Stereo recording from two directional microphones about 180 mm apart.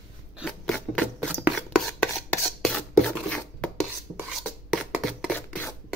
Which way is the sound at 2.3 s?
5° left (ahead or behind).